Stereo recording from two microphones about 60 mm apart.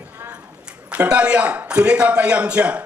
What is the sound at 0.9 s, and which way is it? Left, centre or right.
A woman's voice, centre.